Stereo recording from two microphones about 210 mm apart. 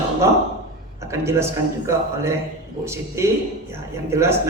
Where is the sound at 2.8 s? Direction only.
10° right (ahead or behind).